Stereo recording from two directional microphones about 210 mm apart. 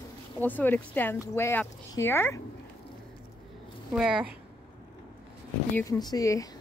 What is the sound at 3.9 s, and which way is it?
Speech, 5° right (ahead or behind).